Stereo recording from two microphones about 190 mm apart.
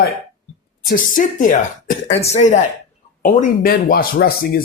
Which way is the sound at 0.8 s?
50° left (ahead or behind).